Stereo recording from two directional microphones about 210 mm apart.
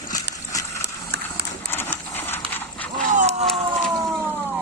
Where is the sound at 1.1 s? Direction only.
55° right (ahead or behind).